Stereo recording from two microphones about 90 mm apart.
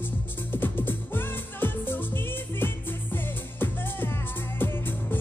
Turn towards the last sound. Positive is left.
turn(degrees=25)  # may be behind; listen again after turning